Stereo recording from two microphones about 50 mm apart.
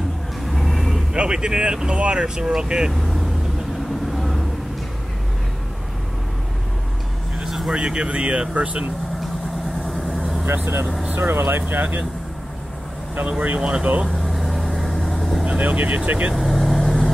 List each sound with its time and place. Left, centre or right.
0.5 s vehicle: centre
1.1 s speech: centre
2.9 s speech: centre
4.1 s vehicle: centre
7.3 s vehicle: centre
7.7 s speech: centre
9.8 s vehicle: centre
10.4 s speech: right
13.3 s speech: right
13.6 s speech: centre
14.0 s vehicle: centre
15.4 s speech: right
16.3 s vehicle: centre